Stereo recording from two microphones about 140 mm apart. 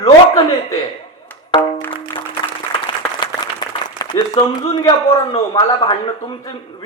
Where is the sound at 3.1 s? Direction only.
30° left (ahead or behind).